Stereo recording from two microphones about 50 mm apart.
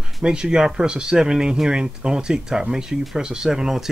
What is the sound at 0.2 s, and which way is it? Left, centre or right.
Speech, centre.